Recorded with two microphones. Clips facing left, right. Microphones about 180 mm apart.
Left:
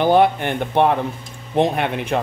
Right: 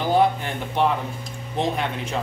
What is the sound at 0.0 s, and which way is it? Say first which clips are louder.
Speech: left 5 dB; 70° left (ahead or behind).